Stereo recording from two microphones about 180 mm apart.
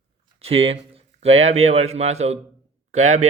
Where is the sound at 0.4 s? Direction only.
30° right (ahead or behind).